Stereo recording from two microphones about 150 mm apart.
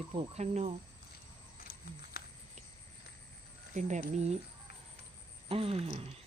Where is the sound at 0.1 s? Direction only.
45° right (ahead or behind).